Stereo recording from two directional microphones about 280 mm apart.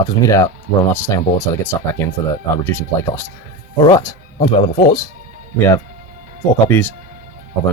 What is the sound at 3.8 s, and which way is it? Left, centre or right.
Speech, centre.